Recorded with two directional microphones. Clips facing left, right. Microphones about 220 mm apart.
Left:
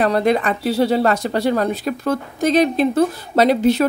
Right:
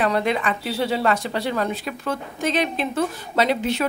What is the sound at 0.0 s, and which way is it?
Speech, 40° left (ahead or behind).